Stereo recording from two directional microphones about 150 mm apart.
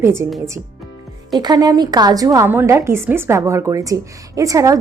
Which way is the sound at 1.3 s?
30° right (ahead or behind).